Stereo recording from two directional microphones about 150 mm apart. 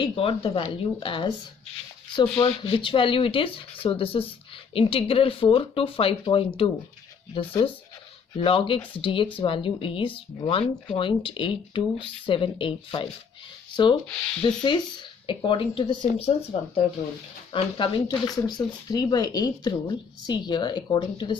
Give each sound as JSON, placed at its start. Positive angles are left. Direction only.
{"t": 0.0, "sound": "speech", "side_deg": 35}
{"t": 14.4, "sound": "speech", "side_deg": 30}